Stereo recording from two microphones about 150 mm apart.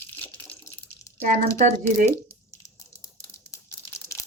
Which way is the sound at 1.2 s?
60° right (ahead or behind).